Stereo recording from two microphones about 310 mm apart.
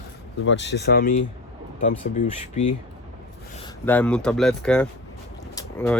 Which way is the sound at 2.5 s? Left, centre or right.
Left.